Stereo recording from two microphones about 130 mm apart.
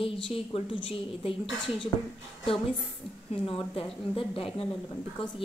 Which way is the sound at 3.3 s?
45° left (ahead or behind).